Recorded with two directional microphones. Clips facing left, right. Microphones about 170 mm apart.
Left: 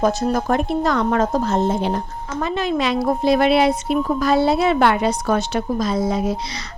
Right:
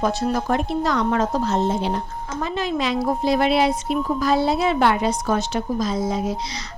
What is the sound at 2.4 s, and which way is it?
A woman's voice, 65° left (ahead or behind).